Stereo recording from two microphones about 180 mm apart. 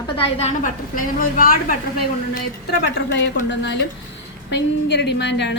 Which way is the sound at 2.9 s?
75° left (ahead or behind).